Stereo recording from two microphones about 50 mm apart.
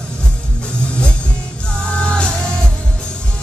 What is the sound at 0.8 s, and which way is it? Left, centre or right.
Music, left.